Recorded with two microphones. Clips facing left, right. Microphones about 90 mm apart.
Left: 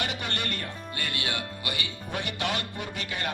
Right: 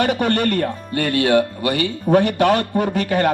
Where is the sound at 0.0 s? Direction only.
50° right (ahead or behind).